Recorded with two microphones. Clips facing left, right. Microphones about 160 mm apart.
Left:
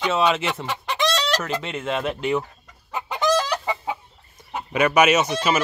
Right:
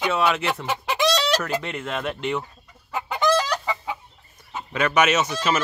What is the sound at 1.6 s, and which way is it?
Speech, 20° left (ahead or behind).